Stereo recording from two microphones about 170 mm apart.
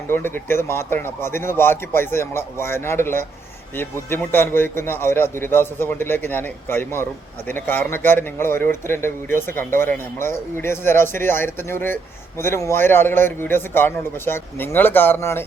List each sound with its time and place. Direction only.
0.1 s a man's voice: 15° left (ahead or behind)